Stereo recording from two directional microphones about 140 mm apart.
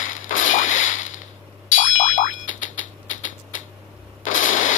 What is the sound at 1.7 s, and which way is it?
Boing, 65° left (ahead or behind).